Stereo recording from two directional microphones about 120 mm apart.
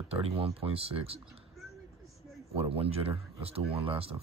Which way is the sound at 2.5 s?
55° right (ahead or behind).